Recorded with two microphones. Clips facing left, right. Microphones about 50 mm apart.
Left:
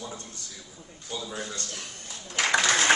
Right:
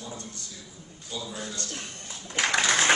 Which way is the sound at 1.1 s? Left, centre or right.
Left.